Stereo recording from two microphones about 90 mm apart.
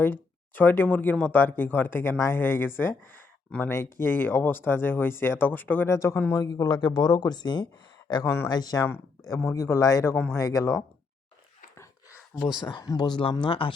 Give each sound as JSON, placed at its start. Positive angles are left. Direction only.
{"t": 0.0, "sound": "speech", "side_deg": 20}
{"t": 5.9, "sound": "a man's voice", "side_deg": 35}
{"t": 6.4, "sound": "speech", "side_deg": 45}
{"t": 9.3, "sound": "a man's voice", "side_deg": 35}
{"t": 12.5, "sound": "speech", "side_deg": 55}
{"t": 13.4, "sound": "speech", "side_deg": 75}